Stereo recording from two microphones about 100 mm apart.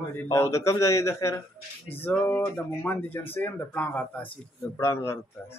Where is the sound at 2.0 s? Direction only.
20° left (ahead or behind).